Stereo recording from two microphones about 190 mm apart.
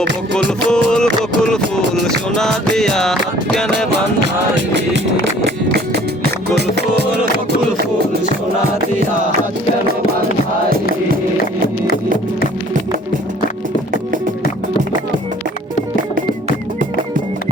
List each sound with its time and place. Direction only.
0.7 s music: 5° left (ahead or behind)
6.6 s music: 60° right (ahead or behind)